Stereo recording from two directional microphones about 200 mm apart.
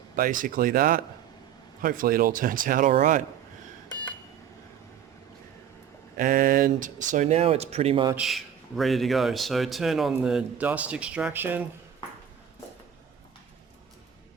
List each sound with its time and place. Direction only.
0.2 s speech: 45° right (ahead or behind)
6.1 s speech: 45° right (ahead or behind); by 8.1 s 25° right (ahead or behind)
8.1 s a man's voice: centre (ahead or behind)